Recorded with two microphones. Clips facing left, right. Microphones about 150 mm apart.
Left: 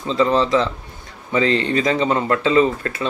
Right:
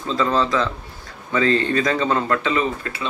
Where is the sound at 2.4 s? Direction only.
35° left (ahead or behind).